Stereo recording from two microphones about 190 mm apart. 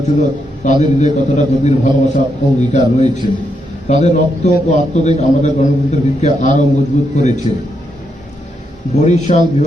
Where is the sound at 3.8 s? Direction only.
35° left (ahead or behind).